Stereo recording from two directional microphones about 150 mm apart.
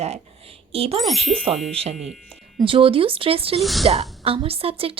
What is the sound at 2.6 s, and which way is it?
Speech, 35° right (ahead or behind).